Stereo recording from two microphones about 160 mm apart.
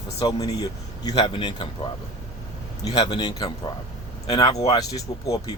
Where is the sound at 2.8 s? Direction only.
25° left (ahead or behind).